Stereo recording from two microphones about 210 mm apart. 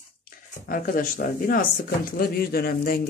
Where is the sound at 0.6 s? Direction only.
40° left (ahead or behind).